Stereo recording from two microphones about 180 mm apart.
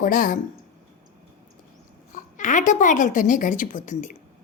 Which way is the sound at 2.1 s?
45° left (ahead or behind).